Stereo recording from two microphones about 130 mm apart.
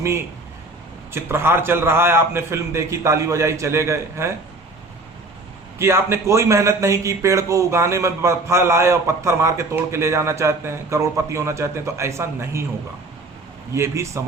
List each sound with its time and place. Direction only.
1.1 s speech: 15° right (ahead or behind)
5.8 s speech: 20° right (ahead or behind)
13.7 s speech: 20° right (ahead or behind)